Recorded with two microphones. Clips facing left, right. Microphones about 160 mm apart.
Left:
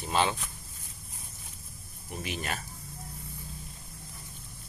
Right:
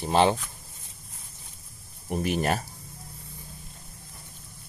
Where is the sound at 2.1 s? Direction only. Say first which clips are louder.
Right 10 dB; 50° right (ahead or behind).